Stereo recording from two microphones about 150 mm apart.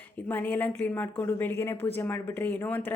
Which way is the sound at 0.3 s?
10° left (ahead or behind).